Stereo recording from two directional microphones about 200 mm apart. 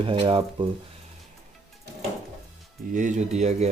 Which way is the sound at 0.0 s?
25° right (ahead or behind).